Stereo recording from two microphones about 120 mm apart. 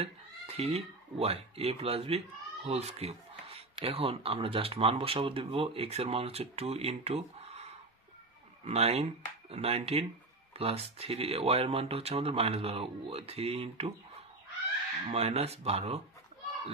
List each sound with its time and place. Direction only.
0.0 s speech: 60° right (ahead or behind)
8.6 s speech: 60° right (ahead or behind)
15.0 s speech: 60° right (ahead or behind)